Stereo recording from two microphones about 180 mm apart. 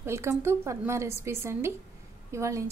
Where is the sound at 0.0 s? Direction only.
15° right (ahead or behind).